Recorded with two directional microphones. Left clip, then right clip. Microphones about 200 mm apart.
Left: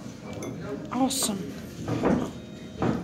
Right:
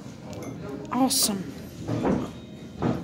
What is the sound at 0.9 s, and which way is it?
Speech, 20° right (ahead or behind).